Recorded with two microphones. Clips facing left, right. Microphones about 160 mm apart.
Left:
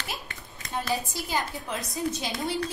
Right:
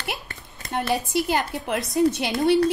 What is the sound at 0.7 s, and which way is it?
A woman's voice, 65° right (ahead or behind).